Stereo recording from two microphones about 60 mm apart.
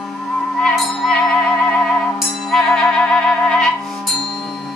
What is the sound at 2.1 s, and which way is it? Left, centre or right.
Music, centre.